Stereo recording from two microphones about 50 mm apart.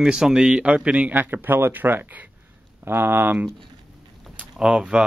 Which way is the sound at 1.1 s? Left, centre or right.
Right.